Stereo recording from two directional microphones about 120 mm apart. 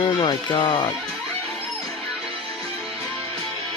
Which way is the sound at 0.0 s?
40° left (ahead or behind).